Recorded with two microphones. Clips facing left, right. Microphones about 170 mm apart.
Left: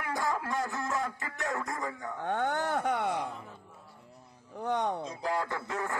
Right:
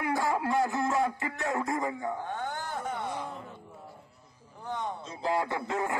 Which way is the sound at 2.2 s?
60° left (ahead or behind).